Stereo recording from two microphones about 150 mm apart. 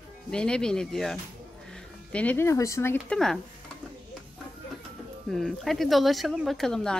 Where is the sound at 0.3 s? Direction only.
5° left (ahead or behind).